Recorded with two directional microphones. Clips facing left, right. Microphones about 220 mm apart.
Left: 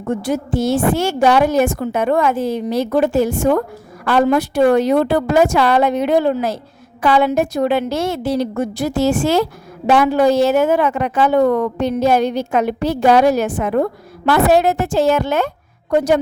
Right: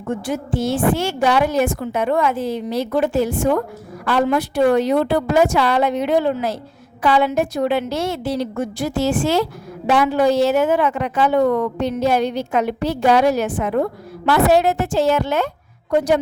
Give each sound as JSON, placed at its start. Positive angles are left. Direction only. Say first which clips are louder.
{"t": 0.0, "sound": "a woman's voice", "louder": "left 4 dB", "side_deg": 40}